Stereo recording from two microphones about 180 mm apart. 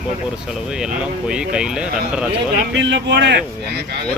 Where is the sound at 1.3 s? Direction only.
5° right (ahead or behind).